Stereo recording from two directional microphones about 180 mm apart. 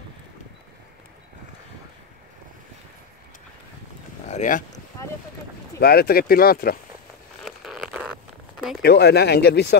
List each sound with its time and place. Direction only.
4.3 s speech: 45° left (ahead or behind)
5.8 s speech: 60° left (ahead or behind)
7.4 s a sound: centre (ahead or behind)
8.8 s speech: 65° left (ahead or behind)